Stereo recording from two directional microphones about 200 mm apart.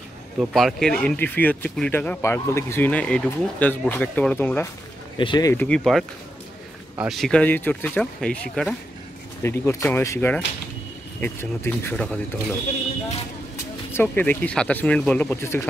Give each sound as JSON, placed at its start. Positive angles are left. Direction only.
{"t": 0.4, "sound": "speech", "side_deg": 0}
{"t": 5.1, "sound": "speech", "side_deg": 25}
{"t": 5.5, "sound": "speech", "side_deg": 5}
{"t": 13.9, "sound": "speech", "side_deg": 10}